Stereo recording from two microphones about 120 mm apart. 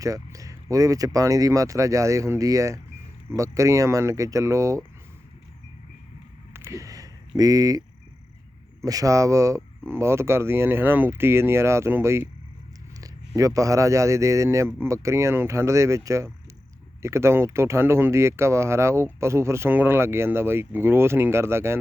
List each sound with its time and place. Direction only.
0.0 s speech: 30° right (ahead or behind)
6.5 s a sound: 25° right (ahead or behind)
8.8 s speech: 30° right (ahead or behind)